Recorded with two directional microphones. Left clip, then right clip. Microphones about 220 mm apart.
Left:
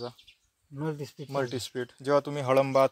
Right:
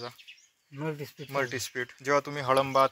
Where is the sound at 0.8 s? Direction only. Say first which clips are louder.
Left 1 dB; 30° left (ahead or behind).